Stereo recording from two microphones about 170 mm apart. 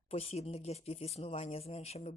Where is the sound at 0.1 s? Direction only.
40° left (ahead or behind).